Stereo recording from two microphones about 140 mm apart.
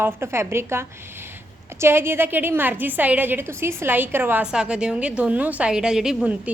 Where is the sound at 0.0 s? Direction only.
20° right (ahead or behind).